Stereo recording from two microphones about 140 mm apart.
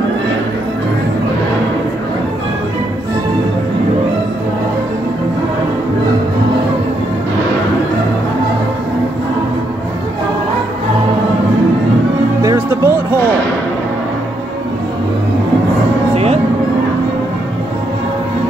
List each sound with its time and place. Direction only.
12.4 s music: 20° right (ahead or behind)